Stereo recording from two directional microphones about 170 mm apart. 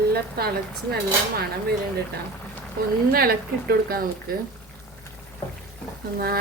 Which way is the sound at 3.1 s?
60° right (ahead or behind).